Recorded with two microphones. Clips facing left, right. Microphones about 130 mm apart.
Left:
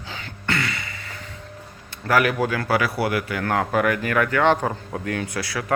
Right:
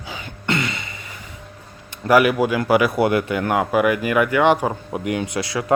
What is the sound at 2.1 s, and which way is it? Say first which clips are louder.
Speech: right 5 dB; 15° right (ahead or behind).